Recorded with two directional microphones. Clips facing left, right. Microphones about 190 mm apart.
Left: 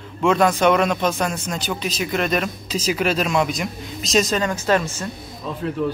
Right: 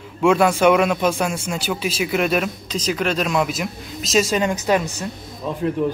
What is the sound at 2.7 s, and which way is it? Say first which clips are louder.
A man's voice: left 4 dB; 10° left (ahead or behind).